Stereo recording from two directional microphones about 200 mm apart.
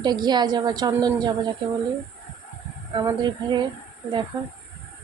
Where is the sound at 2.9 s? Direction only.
20° right (ahead or behind).